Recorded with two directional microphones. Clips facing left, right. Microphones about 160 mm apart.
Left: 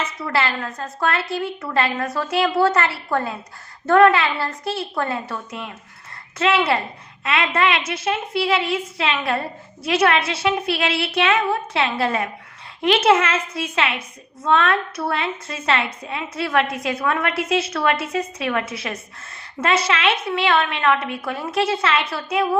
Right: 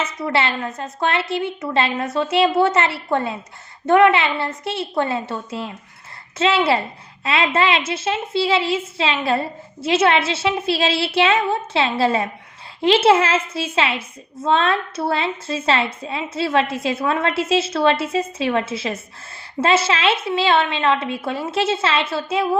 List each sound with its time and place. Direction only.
0.0 s a woman's voice: 20° right (ahead or behind)